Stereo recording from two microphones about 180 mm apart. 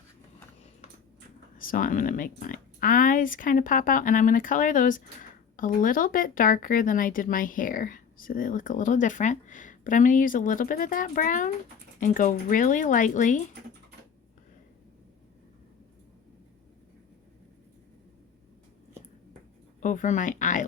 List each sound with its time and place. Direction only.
1.5 s speech: 50° left (ahead or behind)
19.8 s speech: 45° left (ahead or behind)